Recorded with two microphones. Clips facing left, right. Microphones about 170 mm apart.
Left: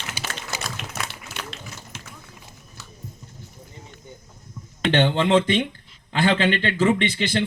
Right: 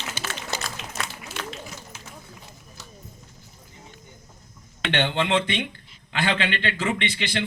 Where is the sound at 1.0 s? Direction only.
70° left (ahead or behind).